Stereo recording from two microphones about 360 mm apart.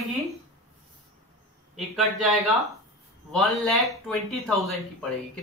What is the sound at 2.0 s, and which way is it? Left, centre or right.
Speech, centre.